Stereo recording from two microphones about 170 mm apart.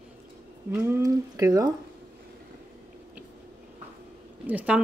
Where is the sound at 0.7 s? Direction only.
15° right (ahead or behind).